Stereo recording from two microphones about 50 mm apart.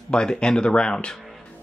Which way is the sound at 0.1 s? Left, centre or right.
Centre.